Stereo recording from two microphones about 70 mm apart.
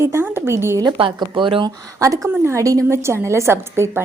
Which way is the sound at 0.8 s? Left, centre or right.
Right.